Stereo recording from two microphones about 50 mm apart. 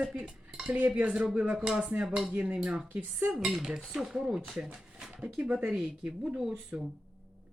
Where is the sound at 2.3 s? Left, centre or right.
Right.